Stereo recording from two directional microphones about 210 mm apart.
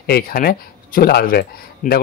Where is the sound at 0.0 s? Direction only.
45° left (ahead or behind).